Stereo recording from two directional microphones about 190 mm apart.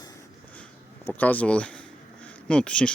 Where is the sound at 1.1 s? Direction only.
10° left (ahead or behind).